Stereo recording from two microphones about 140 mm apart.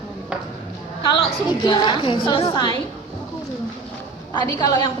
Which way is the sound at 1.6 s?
35° left (ahead or behind).